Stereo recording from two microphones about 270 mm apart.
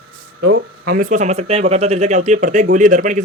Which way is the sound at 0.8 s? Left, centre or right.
Right.